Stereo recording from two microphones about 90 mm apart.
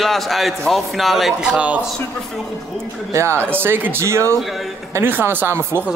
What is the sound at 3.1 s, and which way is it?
Speech, 30° right (ahead or behind).